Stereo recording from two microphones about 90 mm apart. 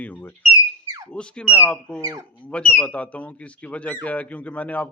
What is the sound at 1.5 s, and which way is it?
Speech, 25° left (ahead or behind).